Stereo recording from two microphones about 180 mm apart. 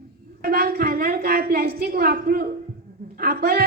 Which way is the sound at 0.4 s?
55° right (ahead or behind).